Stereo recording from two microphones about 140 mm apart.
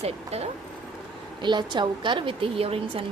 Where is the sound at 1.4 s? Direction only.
35° right (ahead or behind).